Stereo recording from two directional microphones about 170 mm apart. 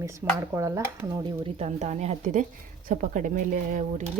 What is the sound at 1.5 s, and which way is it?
Speech, 40° right (ahead or behind).